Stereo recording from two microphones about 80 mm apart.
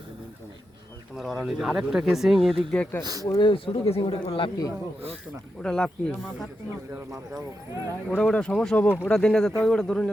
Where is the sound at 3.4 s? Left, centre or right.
Left.